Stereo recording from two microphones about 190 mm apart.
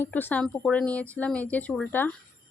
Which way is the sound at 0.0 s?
10° left (ahead or behind).